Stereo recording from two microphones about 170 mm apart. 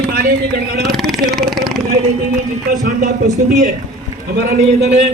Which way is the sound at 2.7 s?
50° right (ahead or behind).